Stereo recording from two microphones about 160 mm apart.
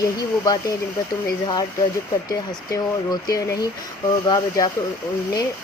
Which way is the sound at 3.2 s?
25° left (ahead or behind).